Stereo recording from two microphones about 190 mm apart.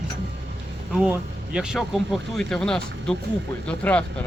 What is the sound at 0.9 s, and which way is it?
Speech, 5° right (ahead or behind).